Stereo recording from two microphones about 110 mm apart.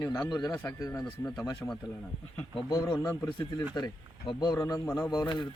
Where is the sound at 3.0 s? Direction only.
25° left (ahead or behind).